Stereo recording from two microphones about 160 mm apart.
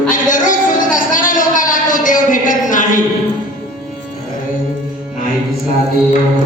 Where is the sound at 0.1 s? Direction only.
55° left (ahead or behind).